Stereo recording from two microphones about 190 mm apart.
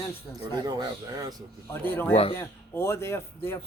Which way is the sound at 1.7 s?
10° left (ahead or behind).